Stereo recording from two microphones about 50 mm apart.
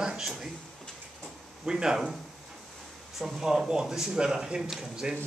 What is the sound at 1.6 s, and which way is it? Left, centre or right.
Speech, centre.